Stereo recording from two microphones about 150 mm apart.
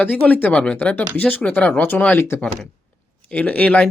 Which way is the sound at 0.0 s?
10° left (ahead or behind).